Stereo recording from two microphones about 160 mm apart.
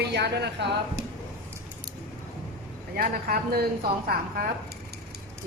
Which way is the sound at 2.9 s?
65° right (ahead or behind).